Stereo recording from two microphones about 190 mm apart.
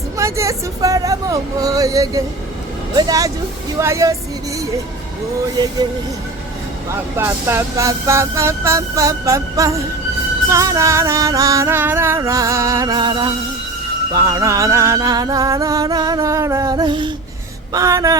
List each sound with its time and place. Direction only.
0.2 s a sound: 15° right (ahead or behind)
2.9 s music: 20° right (ahead or behind)
3.8 s speech: 15° right (ahead or behind)
7.2 s music: 15° right (ahead or behind)